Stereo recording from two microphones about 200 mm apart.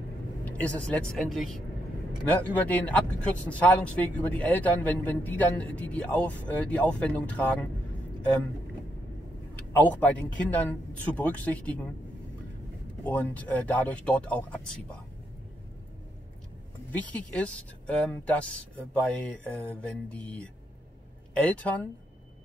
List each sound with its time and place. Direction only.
0.5 s a man's voice: 5° left (ahead or behind)
9.7 s a man's voice: 10° left (ahead or behind)
13.0 s a man's voice: 10° left (ahead or behind)
16.9 s a man's voice: 10° left (ahead or behind)